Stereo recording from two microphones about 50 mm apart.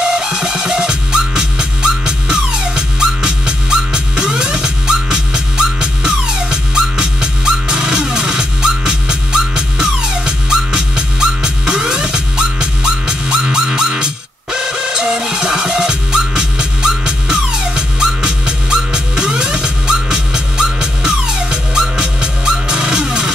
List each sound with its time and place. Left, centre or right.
0.0 s music: centre